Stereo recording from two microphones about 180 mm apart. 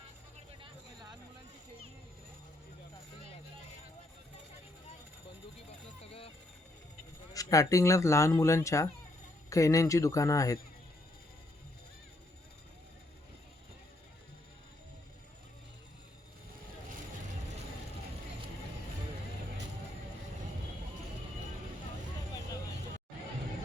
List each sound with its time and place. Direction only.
6.0 s vehicle: 30° left (ahead or behind)
7.3 s speech: 20° left (ahead or behind)